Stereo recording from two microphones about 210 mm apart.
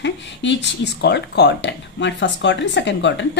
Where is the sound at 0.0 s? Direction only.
60° left (ahead or behind).